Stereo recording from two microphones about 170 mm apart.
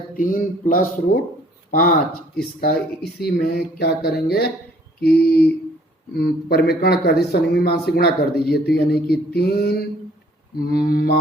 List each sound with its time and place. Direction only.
0.2 s speech: 50° left (ahead or behind); by 4.4 s 65° left (ahead or behind)
4.9 s mantra: 65° left (ahead or behind)
6.1 s speech: 65° left (ahead or behind)
10.6 s mantra: 65° left (ahead or behind)